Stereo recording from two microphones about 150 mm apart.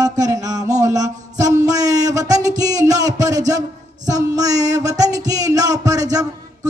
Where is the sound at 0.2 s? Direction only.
25° right (ahead or behind).